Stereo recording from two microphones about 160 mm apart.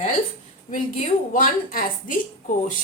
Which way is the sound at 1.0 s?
55° left (ahead or behind).